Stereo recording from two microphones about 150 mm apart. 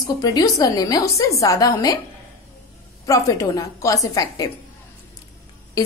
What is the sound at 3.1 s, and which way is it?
A woman's voice, 20° left (ahead or behind).